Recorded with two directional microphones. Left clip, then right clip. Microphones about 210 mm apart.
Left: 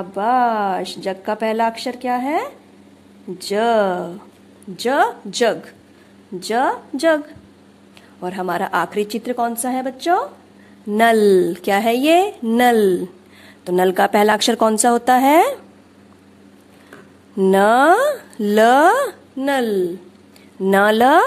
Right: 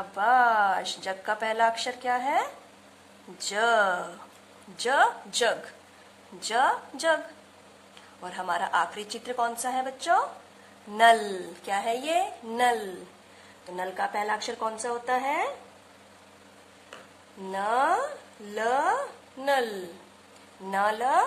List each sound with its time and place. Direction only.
0.1 s speech: 20° left (ahead or behind)
8.2 s a woman's voice: 30° left (ahead or behind); by 15.5 s 50° left (ahead or behind)
17.5 s a woman's voice: 50° left (ahead or behind)
19.4 s a woman's voice: 35° left (ahead or behind)